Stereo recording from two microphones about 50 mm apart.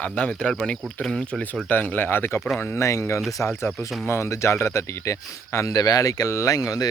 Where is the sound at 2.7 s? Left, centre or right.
Left.